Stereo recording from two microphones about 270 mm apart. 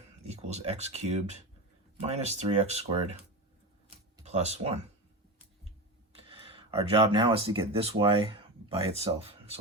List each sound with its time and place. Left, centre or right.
0.4 s speech: right
3.8 s a sound: right
6.2 s speech: centre